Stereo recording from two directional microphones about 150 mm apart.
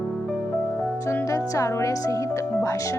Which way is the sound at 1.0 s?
20° left (ahead or behind).